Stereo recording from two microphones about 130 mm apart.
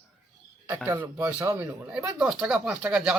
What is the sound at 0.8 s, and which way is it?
Speech, 15° right (ahead or behind).